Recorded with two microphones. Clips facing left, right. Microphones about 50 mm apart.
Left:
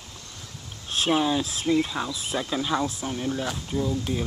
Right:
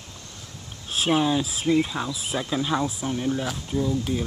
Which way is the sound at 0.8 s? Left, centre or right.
Centre.